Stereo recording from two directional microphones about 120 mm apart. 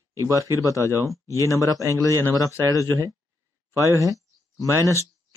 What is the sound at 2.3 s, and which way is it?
Speech, 30° left (ahead or behind).